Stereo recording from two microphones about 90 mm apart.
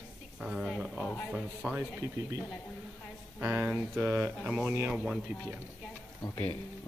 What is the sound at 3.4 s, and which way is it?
Speech, 20° right (ahead or behind).